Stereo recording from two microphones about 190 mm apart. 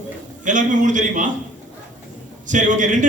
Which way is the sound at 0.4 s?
40° right (ahead or behind).